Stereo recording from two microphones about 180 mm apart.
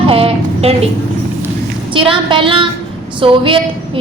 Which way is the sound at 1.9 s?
30° right (ahead or behind).